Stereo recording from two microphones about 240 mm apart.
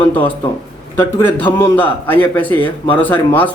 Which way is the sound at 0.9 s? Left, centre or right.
Centre.